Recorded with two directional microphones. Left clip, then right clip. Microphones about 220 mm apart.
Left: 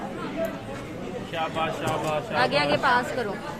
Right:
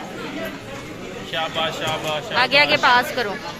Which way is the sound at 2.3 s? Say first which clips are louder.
Right 7 dB; 5° right (ahead or behind).